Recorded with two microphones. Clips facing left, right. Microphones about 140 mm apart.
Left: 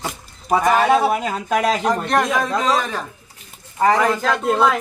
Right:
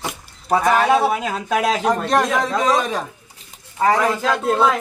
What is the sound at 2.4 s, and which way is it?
Speech, 15° right (ahead or behind).